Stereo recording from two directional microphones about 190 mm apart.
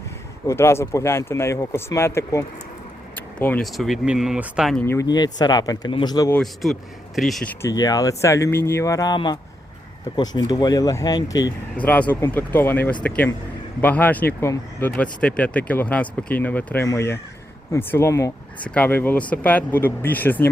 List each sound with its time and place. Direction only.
0.4 s speech: 15° left (ahead or behind)
6.3 s speech: centre (ahead or behind)
7.6 s speech: 20° left (ahead or behind)
11.8 s speech: 10° left (ahead or behind)